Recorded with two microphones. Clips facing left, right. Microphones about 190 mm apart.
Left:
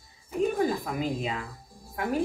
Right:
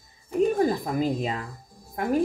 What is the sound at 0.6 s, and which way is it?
Speech, 40° right (ahead or behind).